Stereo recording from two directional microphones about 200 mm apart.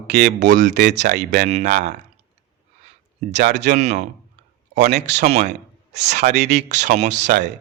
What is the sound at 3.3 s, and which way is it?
Speech, 60° right (ahead or behind).